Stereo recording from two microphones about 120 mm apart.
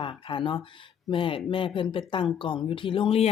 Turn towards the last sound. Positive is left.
turn(degrees=50)  # may be behind; listen again after turning